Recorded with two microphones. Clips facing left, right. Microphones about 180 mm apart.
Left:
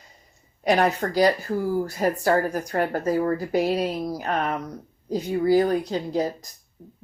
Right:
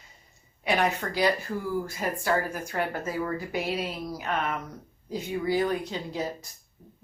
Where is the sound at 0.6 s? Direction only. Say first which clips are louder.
Left 5 dB; 40° left (ahead or behind).